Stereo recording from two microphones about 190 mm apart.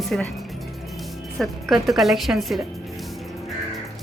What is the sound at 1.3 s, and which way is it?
A woman's voice, centre (ahead or behind).